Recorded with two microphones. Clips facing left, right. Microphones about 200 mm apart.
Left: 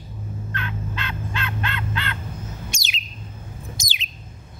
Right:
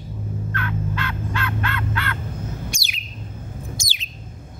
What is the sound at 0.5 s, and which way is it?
Fowl, 20° left (ahead or behind).